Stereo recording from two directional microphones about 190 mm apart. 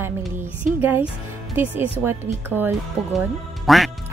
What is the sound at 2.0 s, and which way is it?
Speech, 10° right (ahead or behind).